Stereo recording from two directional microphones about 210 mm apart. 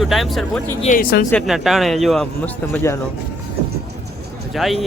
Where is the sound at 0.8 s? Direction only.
40° left (ahead or behind).